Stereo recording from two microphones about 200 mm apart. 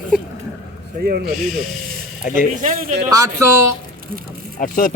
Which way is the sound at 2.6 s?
40° right (ahead or behind).